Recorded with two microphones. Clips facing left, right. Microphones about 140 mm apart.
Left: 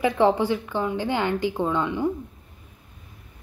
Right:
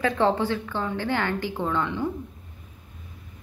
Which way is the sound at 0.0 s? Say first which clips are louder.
Left 3 dB; 15° left (ahead or behind).